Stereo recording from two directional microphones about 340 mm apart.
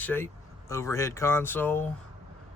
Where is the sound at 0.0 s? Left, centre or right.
Centre.